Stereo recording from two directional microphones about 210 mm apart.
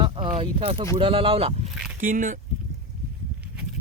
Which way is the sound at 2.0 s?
40° right (ahead or behind).